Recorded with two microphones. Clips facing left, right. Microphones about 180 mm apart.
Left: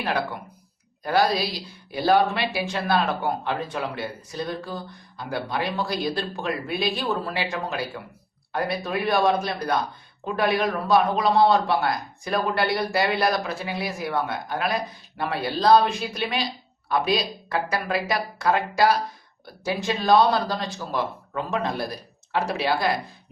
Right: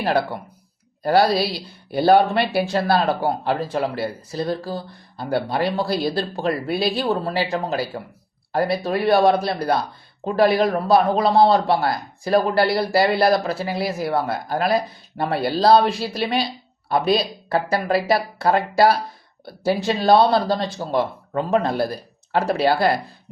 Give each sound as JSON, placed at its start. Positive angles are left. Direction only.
{"t": 0.0, "sound": "speech", "side_deg": -30}
{"t": 1.5, "sound": "speech", "side_deg": 0}
{"t": 2.6, "sound": "speech", "side_deg": -35}